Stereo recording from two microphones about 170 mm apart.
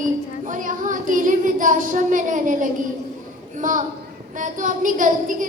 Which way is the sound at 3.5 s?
50° right (ahead or behind).